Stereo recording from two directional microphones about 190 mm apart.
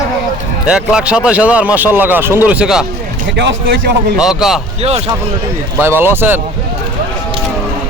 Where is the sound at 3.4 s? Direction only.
60° right (ahead or behind).